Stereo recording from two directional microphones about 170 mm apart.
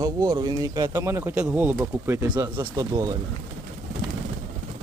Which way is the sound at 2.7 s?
20° right (ahead or behind).